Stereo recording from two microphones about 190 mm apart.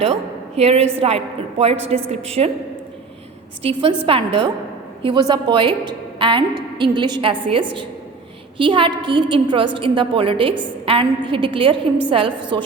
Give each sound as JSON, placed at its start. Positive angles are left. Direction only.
{"t": 0.0, "sound": "a woman's voice", "side_deg": -30}
{"t": 3.6, "sound": "a woman's voice", "side_deg": -30}